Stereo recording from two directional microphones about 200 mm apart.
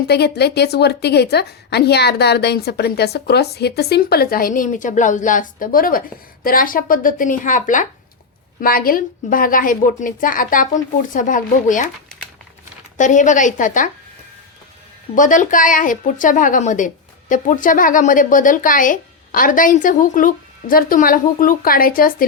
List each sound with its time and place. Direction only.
0.1 s a woman's voice: 55° left (ahead or behind)
13.0 s a woman's voice: 40° left (ahead or behind)
15.1 s a woman's voice: 40° left (ahead or behind)